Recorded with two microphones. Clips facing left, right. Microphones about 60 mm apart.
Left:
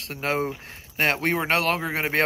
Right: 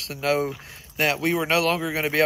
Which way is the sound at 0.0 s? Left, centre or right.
Left.